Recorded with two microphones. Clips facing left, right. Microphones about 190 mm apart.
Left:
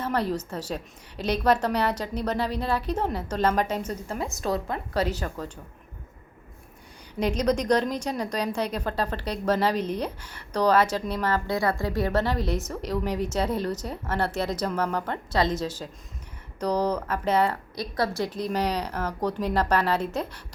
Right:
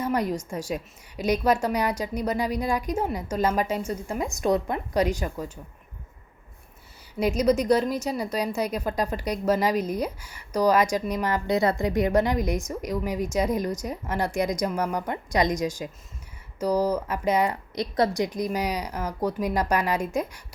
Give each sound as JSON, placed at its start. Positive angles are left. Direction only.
{"t": 0.0, "sound": "a woman's voice", "side_deg": -10}
{"t": 7.2, "sound": "a woman's voice", "side_deg": -10}